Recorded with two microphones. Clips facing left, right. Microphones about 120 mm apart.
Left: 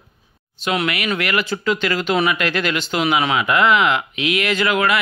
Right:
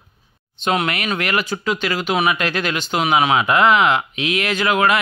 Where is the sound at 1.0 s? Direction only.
20° right (ahead or behind).